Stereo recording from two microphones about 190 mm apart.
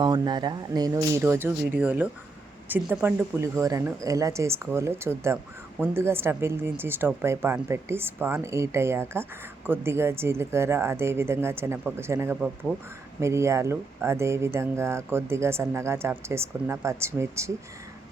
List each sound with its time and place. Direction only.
0.0 s speech: 20° right (ahead or behind)